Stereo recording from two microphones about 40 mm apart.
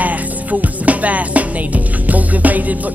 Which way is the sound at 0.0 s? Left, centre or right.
Right.